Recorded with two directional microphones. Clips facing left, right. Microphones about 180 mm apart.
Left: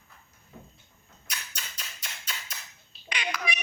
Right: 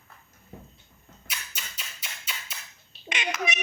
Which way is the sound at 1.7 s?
5° right (ahead or behind).